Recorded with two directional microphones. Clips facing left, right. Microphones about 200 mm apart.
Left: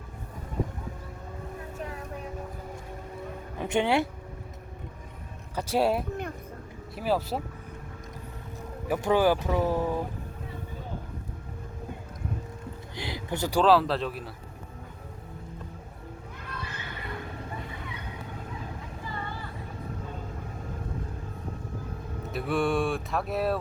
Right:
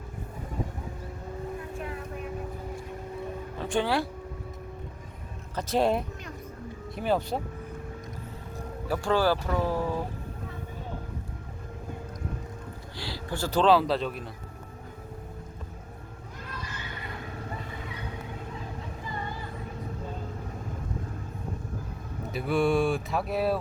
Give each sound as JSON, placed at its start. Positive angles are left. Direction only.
{"t": 1.7, "sound": "vehicle", "side_deg": 40}
{"t": 3.6, "sound": "speech", "side_deg": 20}
{"t": 5.5, "sound": "speech", "side_deg": 10}
{"t": 8.9, "sound": "speech", "side_deg": 15}
{"t": 13.0, "sound": "speech", "side_deg": 20}
{"t": 13.6, "sound": "speech", "side_deg": 0}
{"t": 22.3, "sound": "speech", "side_deg": 0}